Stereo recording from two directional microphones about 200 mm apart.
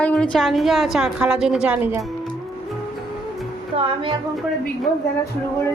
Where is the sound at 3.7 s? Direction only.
25° right (ahead or behind).